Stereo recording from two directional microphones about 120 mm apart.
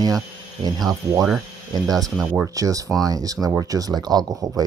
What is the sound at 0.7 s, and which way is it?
Speech, 30° right (ahead or behind).